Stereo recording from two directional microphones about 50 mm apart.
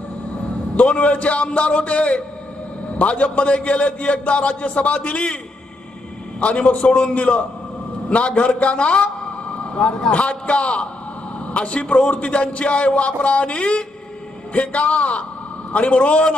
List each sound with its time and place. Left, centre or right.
0.7 s a man's voice: left
6.4 s a man's voice: left
10.1 s a man's voice: left